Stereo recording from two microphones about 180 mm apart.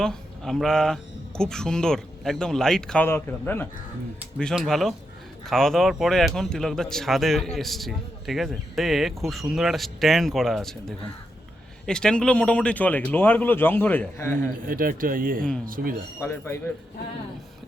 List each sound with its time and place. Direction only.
0.0 s speech: 5° left (ahead or behind)
14.7 s speech: 50° right (ahead or behind)